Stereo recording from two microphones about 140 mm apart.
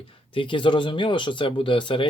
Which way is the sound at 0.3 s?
35° left (ahead or behind).